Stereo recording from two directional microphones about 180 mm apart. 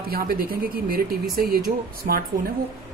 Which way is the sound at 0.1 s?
55° right (ahead or behind).